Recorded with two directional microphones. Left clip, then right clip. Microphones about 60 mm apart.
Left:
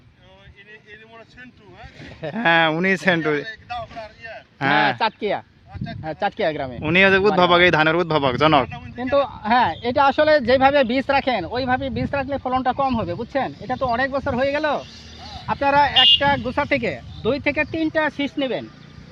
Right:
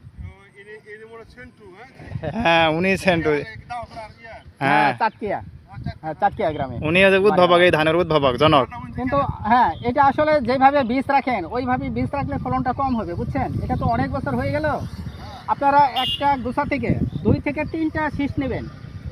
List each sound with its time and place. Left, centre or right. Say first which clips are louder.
2.3 s speech: even; left
4.6 s speech: even; left
6.8 s speech: even; left
8.6 s speech: right 2 dB; left
10.2 s speech: left 1 dB; left
14.9 s a sound: left 1 dB; centre
15.6 s speech: left 2 dB; left